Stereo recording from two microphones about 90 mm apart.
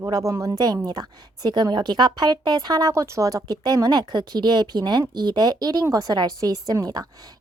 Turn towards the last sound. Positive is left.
turn(degrees=-45)  # may be behind; listen again after turning